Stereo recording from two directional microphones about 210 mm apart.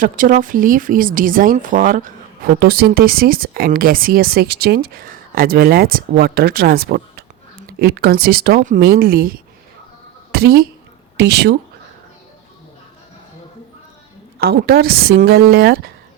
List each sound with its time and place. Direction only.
0.0 s a woman's voice: 40° right (ahead or behind)
14.3 s speech: 50° right (ahead or behind)